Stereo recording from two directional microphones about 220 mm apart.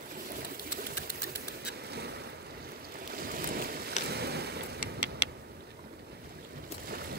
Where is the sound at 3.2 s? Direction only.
40° right (ahead or behind).